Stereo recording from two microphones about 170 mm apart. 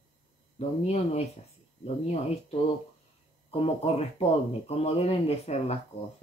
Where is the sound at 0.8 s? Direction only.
40° left (ahead or behind).